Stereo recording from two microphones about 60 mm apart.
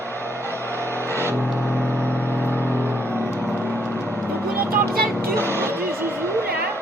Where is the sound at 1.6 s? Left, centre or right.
Centre.